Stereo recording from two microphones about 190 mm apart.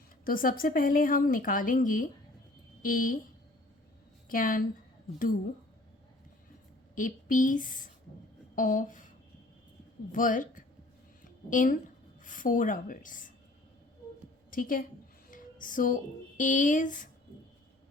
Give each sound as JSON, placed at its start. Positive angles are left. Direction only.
{"t": 0.3, "sound": "a woman's voice", "side_deg": 50}
{"t": 4.3, "sound": "a woman's voice", "side_deg": 45}
{"t": 6.9, "sound": "a woman's voice", "side_deg": 45}
{"t": 10.1, "sound": "a woman's voice", "side_deg": 45}
{"t": 14.5, "sound": "a woman's voice", "side_deg": 45}
{"t": 15.3, "sound": "music", "side_deg": 45}
{"t": 16.4, "sound": "a woman's voice", "side_deg": 45}